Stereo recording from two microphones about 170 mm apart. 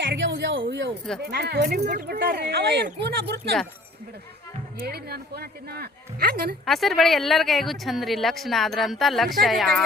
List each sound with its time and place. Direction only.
0.1 s a sound: 90° right
1.2 s speech: 70° right (ahead or behind)
4.8 s speech: 65° right (ahead or behind)
6.7 s speech: centre (ahead or behind)